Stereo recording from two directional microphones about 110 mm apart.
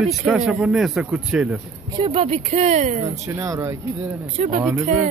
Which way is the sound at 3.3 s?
30° right (ahead or behind).